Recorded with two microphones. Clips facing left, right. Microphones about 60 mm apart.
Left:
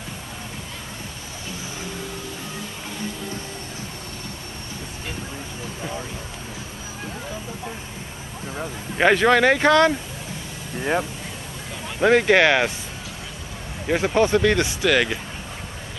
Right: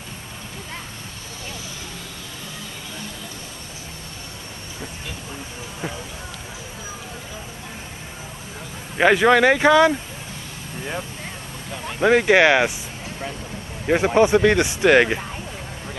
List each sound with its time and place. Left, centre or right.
8.9 s speech: centre
10.8 s speech: left
12.0 s speech: centre
13.8 s speech: centre